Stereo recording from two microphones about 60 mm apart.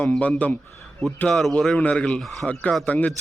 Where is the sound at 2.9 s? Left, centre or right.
Left.